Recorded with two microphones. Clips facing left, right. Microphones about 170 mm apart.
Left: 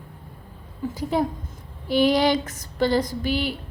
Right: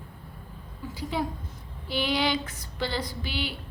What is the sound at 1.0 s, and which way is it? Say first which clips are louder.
A woman's voice: left 6 dB; 45° left (ahead or behind).